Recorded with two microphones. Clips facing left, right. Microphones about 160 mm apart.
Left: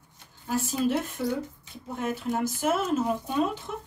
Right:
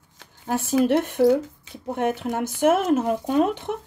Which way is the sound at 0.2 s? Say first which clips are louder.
Right 3 dB; 75° right (ahead or behind).